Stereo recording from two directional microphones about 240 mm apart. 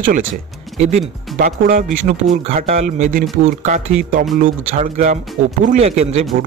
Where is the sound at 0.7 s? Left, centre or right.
Right.